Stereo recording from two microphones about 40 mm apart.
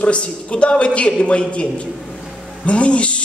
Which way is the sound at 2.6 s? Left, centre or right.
Left.